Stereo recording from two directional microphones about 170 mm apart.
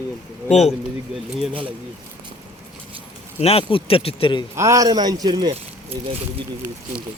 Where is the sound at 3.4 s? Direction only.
35° left (ahead or behind).